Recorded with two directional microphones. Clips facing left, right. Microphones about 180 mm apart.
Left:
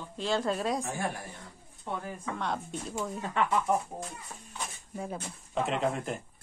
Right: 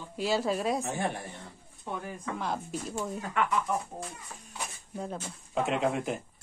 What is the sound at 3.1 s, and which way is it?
Speech, 25° left (ahead or behind).